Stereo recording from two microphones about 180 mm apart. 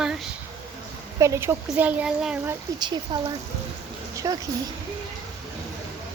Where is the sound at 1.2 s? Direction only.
15° right (ahead or behind).